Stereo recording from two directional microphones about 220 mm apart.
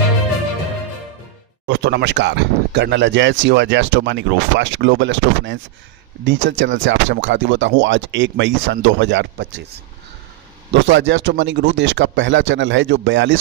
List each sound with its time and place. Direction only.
1.7 s speech: 50° right (ahead or behind)
10.7 s speech: 55° right (ahead or behind)